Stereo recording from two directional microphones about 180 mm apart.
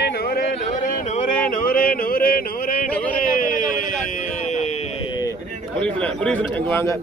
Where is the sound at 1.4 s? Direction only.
50° left (ahead or behind).